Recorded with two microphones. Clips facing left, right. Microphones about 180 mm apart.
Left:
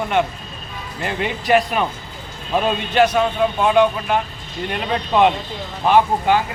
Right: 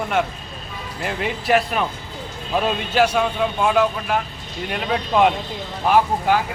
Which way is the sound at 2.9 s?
10° right (ahead or behind).